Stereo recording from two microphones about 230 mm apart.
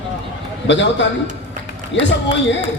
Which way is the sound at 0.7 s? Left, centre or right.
Left.